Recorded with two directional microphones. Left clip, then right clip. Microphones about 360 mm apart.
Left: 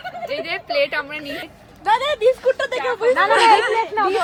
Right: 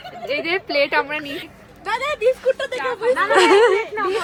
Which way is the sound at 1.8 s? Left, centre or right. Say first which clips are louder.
Left 3 dB; left.